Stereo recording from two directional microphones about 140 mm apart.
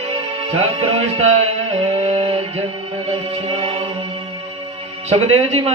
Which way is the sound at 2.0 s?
50° right (ahead or behind).